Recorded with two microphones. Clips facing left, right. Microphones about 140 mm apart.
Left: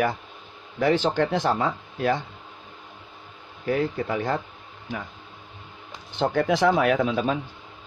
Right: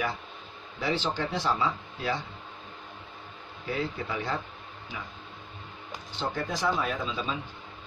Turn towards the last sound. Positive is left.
turn(degrees=65)  # may be behind; listen again after turning